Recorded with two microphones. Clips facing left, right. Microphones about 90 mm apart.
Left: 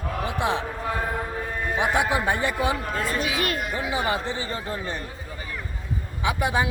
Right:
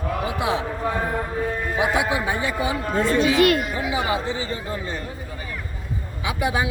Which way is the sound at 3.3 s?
90° right.